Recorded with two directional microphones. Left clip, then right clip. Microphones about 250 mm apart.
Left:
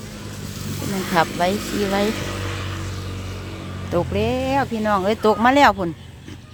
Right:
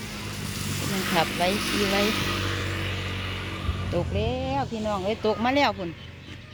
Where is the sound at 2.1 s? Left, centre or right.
Right.